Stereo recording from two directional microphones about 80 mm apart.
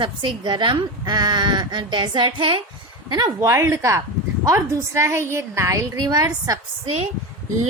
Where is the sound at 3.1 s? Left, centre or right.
Right.